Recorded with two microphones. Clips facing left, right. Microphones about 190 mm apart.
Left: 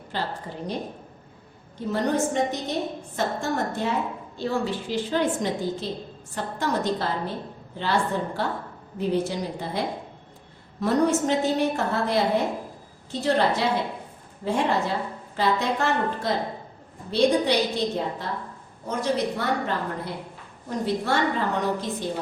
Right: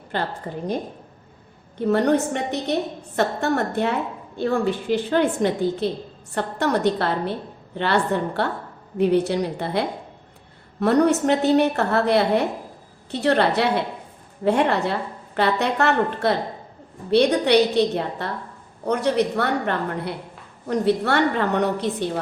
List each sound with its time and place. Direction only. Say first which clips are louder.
0.1 s a woman's voice: right 4 dB; 60° right (ahead or behind)
1.8 s a woman's voice: right 5 dB; 65° right (ahead or behind)